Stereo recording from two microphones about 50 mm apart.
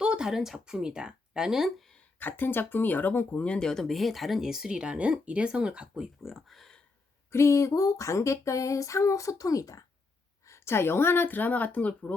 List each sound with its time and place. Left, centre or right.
0.0 s speech: centre
2.1 s speech: left
3.6 s speech: centre
4.8 s speech: right
6.2 s speech: centre
7.3 s a sound: left
10.5 s speech: left